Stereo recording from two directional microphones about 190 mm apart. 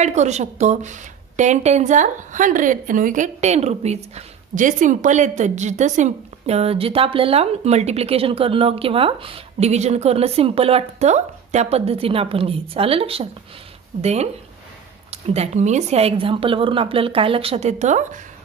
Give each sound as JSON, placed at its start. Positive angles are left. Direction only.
{"t": 0.0, "sound": "a woman's voice", "side_deg": -35}